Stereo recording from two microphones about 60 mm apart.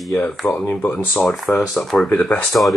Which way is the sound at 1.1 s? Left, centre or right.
Centre.